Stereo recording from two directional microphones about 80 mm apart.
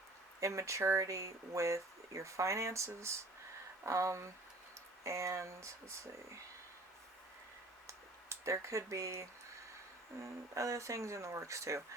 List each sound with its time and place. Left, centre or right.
0.3 s speech: right
7.9 s a sound: right
10.5 s speech: right